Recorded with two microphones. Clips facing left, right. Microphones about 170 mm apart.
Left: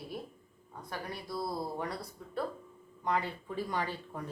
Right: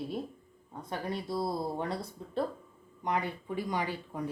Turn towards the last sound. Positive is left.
turn(degrees=-15)  # may be behind; listen again after turning